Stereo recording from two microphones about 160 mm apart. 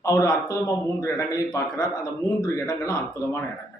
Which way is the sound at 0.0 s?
20° left (ahead or behind).